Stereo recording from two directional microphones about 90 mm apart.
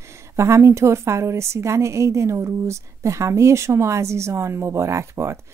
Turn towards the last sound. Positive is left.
turn(degrees=-30)  # may be behind; listen again after turning